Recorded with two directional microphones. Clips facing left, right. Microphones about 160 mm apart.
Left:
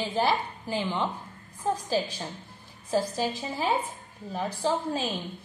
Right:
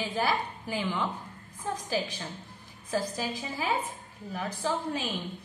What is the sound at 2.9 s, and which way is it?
A woman's voice, 30° left (ahead or behind).